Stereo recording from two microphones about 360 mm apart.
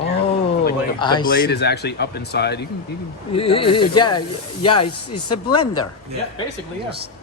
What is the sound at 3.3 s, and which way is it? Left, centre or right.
Speech, centre.